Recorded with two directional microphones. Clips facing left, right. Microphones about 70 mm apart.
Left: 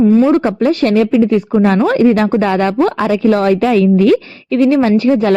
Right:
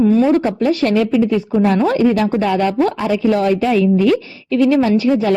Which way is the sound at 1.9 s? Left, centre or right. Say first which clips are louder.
Left 4 dB; left.